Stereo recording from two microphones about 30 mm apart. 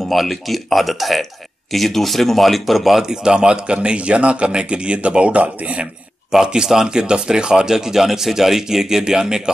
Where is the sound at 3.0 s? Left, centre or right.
Right.